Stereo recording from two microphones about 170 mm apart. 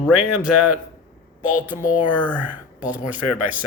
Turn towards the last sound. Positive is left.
turn(degrees=-10)  # may be behind; listen again after turning